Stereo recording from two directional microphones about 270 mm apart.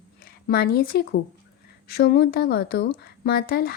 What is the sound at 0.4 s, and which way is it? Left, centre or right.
Speech, left.